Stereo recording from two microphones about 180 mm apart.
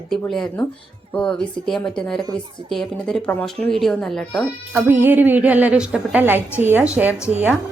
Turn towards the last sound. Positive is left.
turn(degrees=-10)  # may be behind; listen again after turning